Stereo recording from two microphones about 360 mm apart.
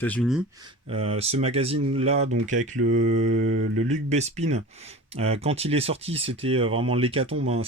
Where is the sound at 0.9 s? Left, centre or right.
Centre.